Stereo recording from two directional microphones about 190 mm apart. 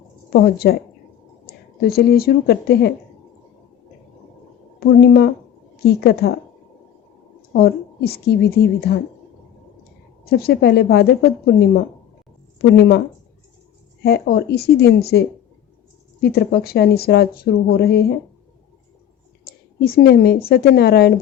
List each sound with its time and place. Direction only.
0.4 s a woman's voice: 55° left (ahead or behind)
4.8 s a woman's voice: 55° left (ahead or behind)
7.5 s a woman's voice: 55° left (ahead or behind)
10.2 s a woman's voice: 55° left (ahead or behind)
14.0 s a woman's voice: 55° left (ahead or behind)
19.8 s a woman's voice: 55° left (ahead or behind)